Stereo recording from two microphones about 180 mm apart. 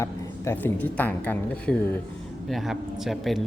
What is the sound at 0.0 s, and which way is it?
Speech, 15° left (ahead or behind).